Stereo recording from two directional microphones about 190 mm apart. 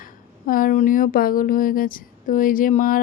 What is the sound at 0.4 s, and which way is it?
Speech, 45° left (ahead or behind).